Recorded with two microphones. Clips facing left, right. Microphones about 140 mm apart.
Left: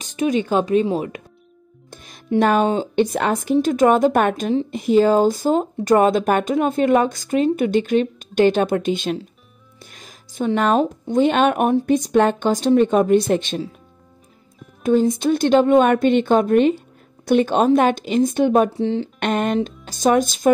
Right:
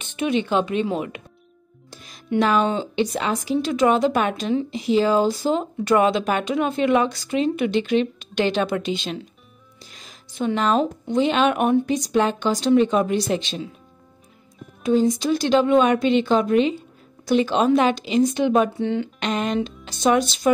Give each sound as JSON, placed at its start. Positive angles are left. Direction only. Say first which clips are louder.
{"t": 0.0, "sound": "speech", "louder": "left 3 dB", "side_deg": 40}
{"t": 1.9, "sound": "music", "louder": "left 2 dB", "side_deg": 50}
{"t": 2.3, "sound": "speech", "louder": "left 3 dB", "side_deg": 50}
{"t": 14.8, "sound": "speech", "louder": "left 2 dB", "side_deg": 50}
{"t": 19.1, "sound": "speech", "louder": "left 3 dB", "side_deg": 55}